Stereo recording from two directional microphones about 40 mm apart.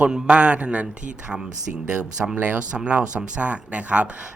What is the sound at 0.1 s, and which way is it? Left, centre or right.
Speech, right.